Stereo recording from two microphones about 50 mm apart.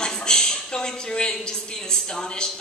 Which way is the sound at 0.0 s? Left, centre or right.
Centre.